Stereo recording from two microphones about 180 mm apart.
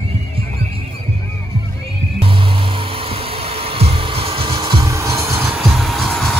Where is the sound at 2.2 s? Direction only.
30° right (ahead or behind).